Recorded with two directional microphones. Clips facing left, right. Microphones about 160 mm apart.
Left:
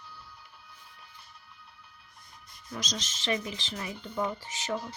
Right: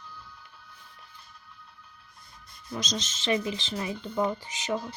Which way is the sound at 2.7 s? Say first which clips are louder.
Right 4 dB; 20° right (ahead or behind).